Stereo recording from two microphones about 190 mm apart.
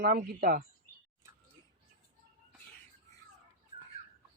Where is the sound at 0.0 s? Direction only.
50° right (ahead or behind).